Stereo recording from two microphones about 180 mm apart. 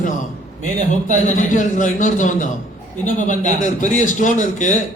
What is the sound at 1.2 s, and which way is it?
Speech, 45° left (ahead or behind).